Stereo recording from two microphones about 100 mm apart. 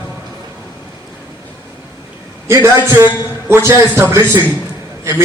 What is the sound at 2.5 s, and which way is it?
A man's voice, 30° right (ahead or behind).